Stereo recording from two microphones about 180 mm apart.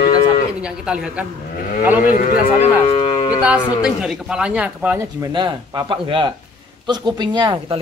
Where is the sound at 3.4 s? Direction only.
5° right (ahead or behind); by 7.7 s 25° right (ahead or behind).